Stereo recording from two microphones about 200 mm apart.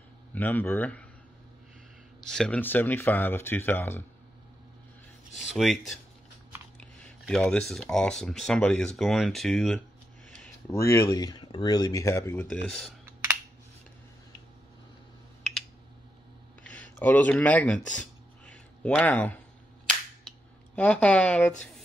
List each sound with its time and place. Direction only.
0.3 s speech: 10° left (ahead or behind)
2.2 s speech: 5° left (ahead or behind)
5.5 s speech: centre (ahead or behind)
10.4 s speech: 15° left (ahead or behind)
13.0 s finger snapping: 10° right (ahead or behind)
16.6 s a sound: 5° left (ahead or behind)
19.9 s cap gun: 5° left (ahead or behind)